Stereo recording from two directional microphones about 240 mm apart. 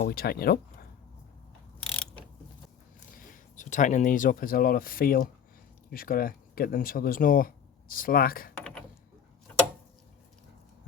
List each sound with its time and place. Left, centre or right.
0.0 s speech: left
1.9 s mechanisms: centre
3.2 s speech: left